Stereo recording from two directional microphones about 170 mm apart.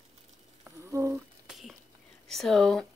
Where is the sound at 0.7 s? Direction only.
15° right (ahead or behind).